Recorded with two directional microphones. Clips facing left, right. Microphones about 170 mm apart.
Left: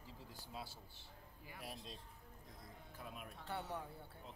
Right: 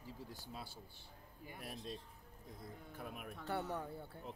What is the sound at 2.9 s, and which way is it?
Speech, 55° right (ahead or behind).